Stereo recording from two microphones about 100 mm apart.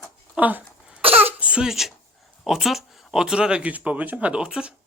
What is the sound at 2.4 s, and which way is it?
Speech, centre (ahead or behind).